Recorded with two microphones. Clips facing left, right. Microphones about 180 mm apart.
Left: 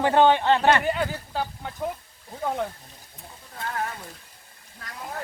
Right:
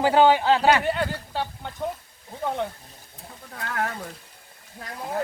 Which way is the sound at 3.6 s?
70° right (ahead or behind).